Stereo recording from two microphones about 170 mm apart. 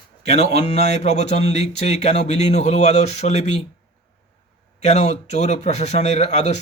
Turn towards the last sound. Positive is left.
turn(degrees=40)  # may be behind; listen again after turning